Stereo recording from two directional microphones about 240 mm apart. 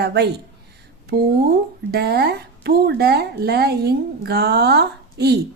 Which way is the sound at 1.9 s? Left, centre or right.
Right.